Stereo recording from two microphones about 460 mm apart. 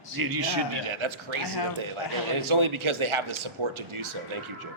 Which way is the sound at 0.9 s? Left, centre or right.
Right.